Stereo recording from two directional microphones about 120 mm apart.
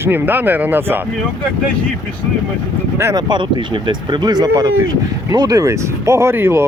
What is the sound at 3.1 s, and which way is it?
Speech, 40° right (ahead or behind).